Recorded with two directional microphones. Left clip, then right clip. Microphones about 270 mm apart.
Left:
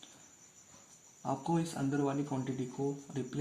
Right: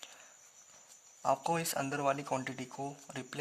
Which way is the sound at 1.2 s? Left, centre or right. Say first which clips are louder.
Right 3 dB; right.